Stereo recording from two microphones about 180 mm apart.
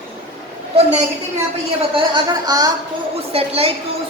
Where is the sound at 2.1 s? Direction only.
20° right (ahead or behind).